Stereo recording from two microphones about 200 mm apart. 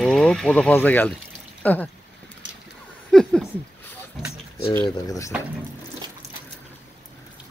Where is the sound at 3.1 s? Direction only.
5° left (ahead or behind).